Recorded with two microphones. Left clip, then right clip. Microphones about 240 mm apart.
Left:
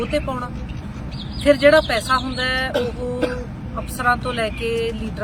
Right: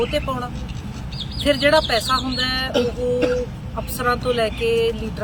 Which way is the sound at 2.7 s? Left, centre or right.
Left.